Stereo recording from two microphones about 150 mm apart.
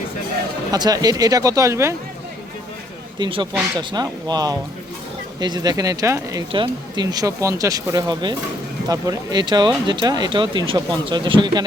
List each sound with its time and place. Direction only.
0.7 s speech: 25° right (ahead or behind)
3.2 s speech: 35° right (ahead or behind)
6.5 s speech: 30° right (ahead or behind)